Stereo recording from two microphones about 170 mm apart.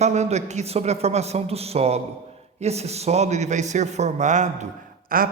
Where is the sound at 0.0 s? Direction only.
40° right (ahead or behind).